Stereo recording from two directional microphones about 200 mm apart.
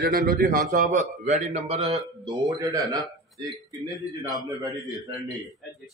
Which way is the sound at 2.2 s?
15° right (ahead or behind).